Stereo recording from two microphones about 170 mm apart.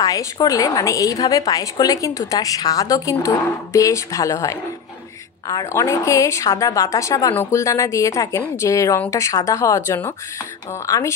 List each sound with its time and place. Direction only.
0.0 s a woman's voice: 20° left (ahead or behind)